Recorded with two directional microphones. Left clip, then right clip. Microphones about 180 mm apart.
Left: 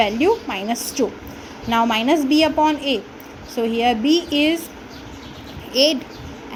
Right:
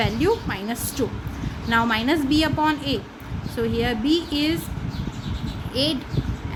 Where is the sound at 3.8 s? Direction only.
20° right (ahead or behind).